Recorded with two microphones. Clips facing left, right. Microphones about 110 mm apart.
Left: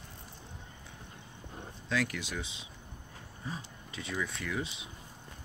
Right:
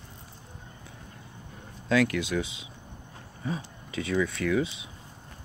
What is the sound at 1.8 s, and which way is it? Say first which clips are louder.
Speech: right 9 dB; 90° right.